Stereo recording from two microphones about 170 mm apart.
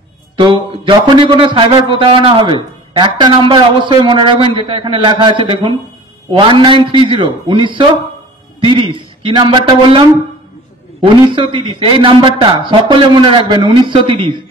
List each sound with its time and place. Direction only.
0.4 s a man's voice: 30° right (ahead or behind)